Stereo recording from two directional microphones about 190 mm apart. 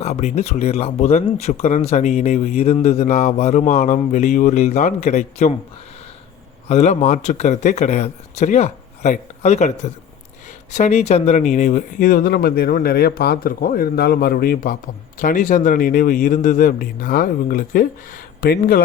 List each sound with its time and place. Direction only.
0.0 s speech: 35° left (ahead or behind)
6.7 s speech: 35° left (ahead or behind); by 18.8 s 50° left (ahead or behind)